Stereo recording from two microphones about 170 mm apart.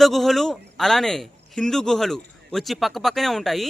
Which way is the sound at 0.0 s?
Centre (ahead or behind).